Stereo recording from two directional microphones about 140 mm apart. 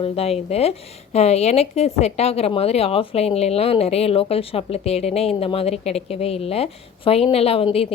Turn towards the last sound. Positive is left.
turn(degrees=40)  # may be behind; listen again after turning